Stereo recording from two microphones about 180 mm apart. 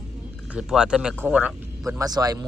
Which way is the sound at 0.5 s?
5° right (ahead or behind).